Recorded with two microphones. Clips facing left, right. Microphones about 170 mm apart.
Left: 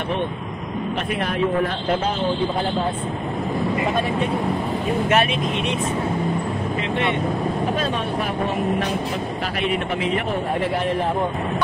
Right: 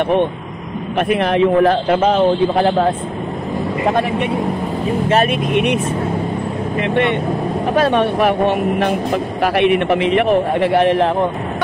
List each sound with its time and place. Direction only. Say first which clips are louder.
0.9 s a man's voice: right 11 dB; 80° right
5.3 s speech: right 7 dB; 60° right (ahead or behind)
6.8 s speech: right 8 dB; 60° right (ahead or behind); by 11.1 s 80° right